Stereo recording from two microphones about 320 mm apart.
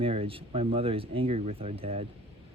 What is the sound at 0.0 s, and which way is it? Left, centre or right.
Speech, centre.